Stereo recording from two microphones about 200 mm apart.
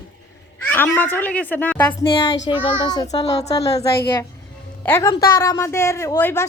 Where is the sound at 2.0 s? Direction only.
25° left (ahead or behind).